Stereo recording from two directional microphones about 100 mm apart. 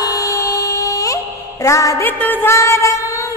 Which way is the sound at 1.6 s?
30° left (ahead or behind).